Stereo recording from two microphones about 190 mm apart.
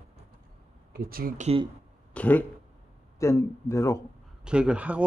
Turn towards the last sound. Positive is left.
turn(degrees=-5)  # may be behind; listen again after turning